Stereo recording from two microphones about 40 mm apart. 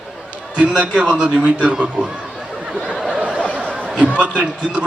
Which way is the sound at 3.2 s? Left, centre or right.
Right.